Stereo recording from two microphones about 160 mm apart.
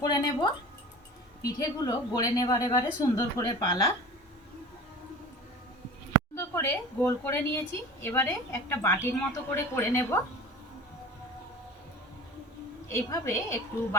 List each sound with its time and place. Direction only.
0.0 s a woman's voice: 25° left (ahead or behind)
6.3 s a woman's voice: 15° left (ahead or behind)
12.9 s a woman's voice: 15° left (ahead or behind)